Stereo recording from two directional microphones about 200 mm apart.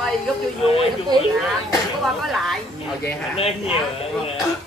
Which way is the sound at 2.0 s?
Centre (ahead or behind).